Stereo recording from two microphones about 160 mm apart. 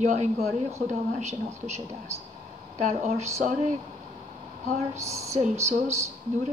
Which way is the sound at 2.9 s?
45° right (ahead or behind).